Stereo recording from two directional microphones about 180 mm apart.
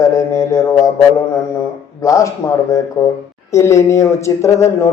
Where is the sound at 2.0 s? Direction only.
15° left (ahead or behind).